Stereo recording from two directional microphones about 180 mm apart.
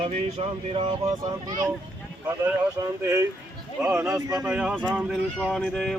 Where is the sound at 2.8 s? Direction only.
15° right (ahead or behind).